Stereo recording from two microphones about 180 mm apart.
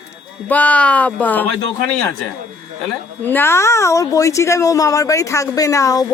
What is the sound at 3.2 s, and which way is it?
Speech, 10° left (ahead or behind).